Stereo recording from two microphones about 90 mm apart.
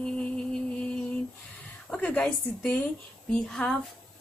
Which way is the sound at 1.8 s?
15° left (ahead or behind).